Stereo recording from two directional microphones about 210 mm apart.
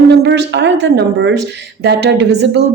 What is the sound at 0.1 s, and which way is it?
A woman's voice, 55° right (ahead or behind).